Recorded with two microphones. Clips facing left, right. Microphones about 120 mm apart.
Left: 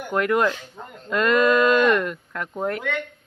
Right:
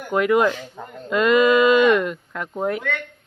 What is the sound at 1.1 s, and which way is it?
Speech, 5° right (ahead or behind).